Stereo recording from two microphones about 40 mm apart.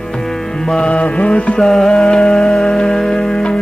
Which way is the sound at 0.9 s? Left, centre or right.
Left.